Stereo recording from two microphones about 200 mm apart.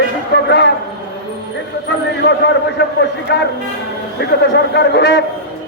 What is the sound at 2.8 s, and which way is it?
A man's voice, 55° left (ahead or behind).